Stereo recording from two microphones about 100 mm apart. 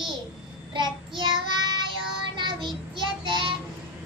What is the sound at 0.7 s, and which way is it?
Child singing, 50° right (ahead or behind).